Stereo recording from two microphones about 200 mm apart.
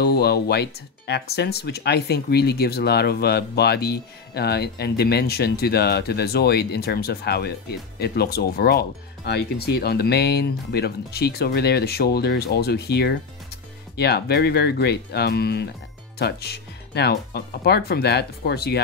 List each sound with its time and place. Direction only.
0.0 s speech: 55° left (ahead or behind)